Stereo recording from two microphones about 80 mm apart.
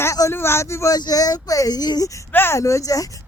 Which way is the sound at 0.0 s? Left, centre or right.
Left.